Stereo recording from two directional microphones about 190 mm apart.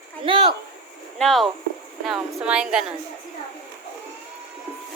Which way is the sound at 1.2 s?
Centre (ahead or behind).